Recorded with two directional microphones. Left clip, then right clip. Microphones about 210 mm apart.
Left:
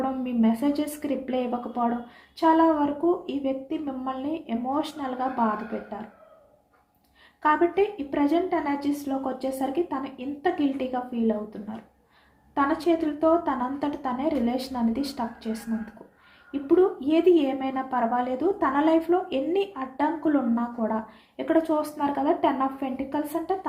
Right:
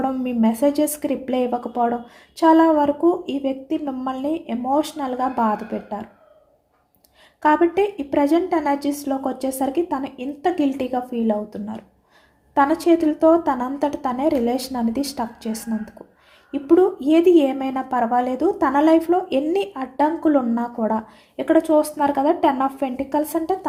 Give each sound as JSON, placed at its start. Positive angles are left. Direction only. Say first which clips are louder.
{"t": 0.0, "sound": "a woman's voice", "louder": "right 5 dB", "side_deg": -55}
{"t": 7.4, "sound": "a woman's voice", "louder": "right 5 dB", "side_deg": -55}